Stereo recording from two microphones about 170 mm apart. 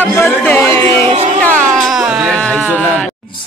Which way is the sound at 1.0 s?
35° right (ahead or behind).